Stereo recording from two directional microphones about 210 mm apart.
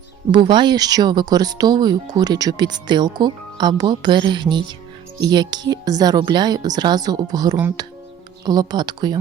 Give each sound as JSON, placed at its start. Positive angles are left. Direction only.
{"t": 0.3, "sound": "speech", "side_deg": -20}